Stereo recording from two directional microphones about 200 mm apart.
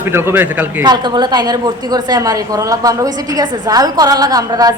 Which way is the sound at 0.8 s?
20° right (ahead or behind).